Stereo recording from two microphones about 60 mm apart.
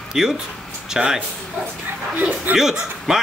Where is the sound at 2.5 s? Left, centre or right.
Centre.